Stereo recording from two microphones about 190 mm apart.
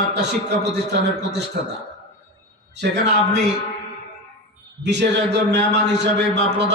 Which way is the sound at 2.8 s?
65° right (ahead or behind).